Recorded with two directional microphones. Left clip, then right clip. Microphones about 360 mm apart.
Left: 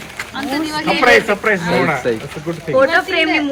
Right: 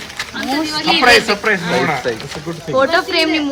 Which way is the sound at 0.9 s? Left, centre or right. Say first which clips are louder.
Right 1 dB; centre.